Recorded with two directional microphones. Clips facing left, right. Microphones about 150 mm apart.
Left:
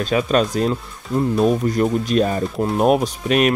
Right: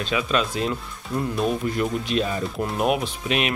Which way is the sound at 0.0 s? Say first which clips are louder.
Left 6 dB; 45° left (ahead or behind).